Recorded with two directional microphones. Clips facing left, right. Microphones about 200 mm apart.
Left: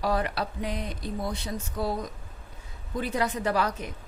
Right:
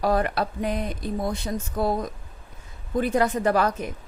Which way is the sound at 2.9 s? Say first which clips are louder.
Right 6 dB; 50° right (ahead or behind).